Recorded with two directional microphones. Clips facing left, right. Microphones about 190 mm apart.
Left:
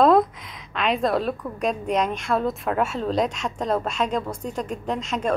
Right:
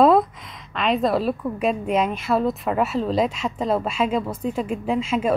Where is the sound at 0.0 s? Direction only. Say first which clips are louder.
Right 1 dB; 5° right (ahead or behind).